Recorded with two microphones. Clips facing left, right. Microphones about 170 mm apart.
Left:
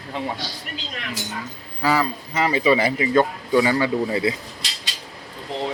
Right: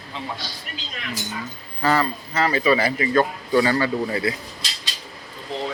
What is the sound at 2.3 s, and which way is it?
Speech, 15° left (ahead or behind).